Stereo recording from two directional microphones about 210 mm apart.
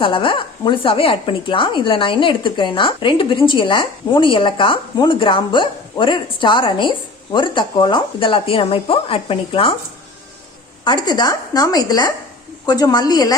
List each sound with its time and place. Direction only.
0.0 s speech: 25° left (ahead or behind)
10.8 s speech: 20° left (ahead or behind)